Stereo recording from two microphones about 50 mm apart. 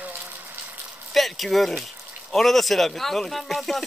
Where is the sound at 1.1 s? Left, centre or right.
Centre.